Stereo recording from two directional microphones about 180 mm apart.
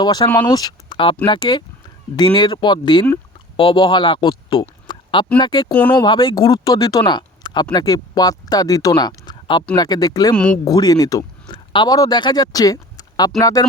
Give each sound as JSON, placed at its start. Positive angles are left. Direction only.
{"t": 0.0, "sound": "speech", "side_deg": 20}
{"t": 4.9, "sound": "a sound", "side_deg": 25}
{"t": 5.4, "sound": "speech", "side_deg": 25}
{"t": 5.7, "sound": "speech", "side_deg": 5}
{"t": 6.0, "sound": "speech", "side_deg": 25}
{"t": 10.3, "sound": "speech", "side_deg": 5}
{"t": 10.7, "sound": "speech", "side_deg": 20}